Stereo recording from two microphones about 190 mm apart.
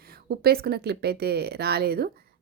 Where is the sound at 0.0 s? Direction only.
55° right (ahead or behind).